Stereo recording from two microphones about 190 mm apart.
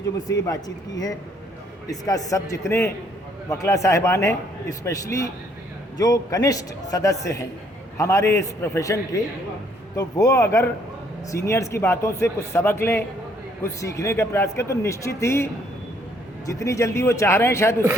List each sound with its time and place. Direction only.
0.4 s a man's voice: 20° left (ahead or behind)
16.5 s a man's voice: 15° left (ahead or behind)